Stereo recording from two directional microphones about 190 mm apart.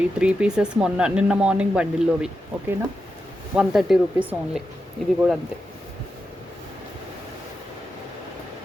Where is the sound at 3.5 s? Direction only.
5° right (ahead or behind).